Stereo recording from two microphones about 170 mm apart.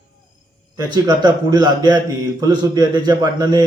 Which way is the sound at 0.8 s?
25° right (ahead or behind).